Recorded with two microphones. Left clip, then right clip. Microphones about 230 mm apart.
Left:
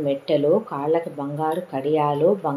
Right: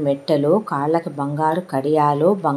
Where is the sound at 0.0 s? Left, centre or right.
Right.